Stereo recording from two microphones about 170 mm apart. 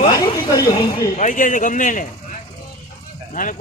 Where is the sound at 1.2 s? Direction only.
50° left (ahead or behind).